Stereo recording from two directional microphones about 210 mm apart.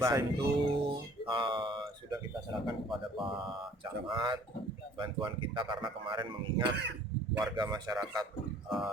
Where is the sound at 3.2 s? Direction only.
25° right (ahead or behind).